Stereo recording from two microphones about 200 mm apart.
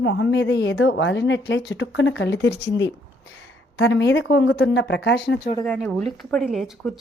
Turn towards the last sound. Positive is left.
turn(degrees=0)  # may be behind; listen again after turning